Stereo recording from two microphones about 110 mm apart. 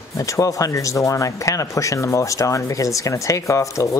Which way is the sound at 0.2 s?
30° left (ahead or behind).